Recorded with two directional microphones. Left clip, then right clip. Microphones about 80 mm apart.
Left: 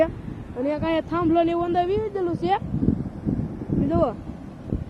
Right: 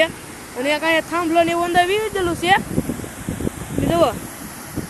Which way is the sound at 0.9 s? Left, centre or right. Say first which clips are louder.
Right 4 dB; centre.